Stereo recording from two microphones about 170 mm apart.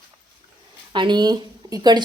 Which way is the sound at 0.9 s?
25° right (ahead or behind).